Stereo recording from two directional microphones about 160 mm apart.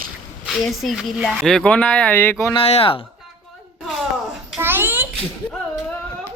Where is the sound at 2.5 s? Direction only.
35° left (ahead or behind).